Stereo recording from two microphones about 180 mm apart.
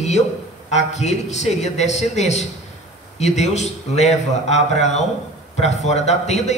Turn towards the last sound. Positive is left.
turn(degrees=40)  # may be behind; listen again after turning